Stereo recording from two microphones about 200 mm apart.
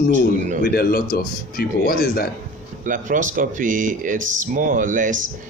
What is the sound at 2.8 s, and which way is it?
Speech, 40° right (ahead or behind).